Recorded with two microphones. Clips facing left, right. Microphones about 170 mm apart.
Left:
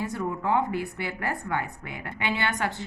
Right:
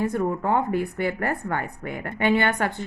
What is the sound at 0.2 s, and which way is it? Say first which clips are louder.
A woman's voice: right 3 dB; 45° right (ahead or behind).